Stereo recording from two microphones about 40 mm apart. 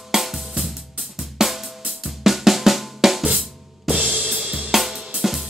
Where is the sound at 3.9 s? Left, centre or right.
Right.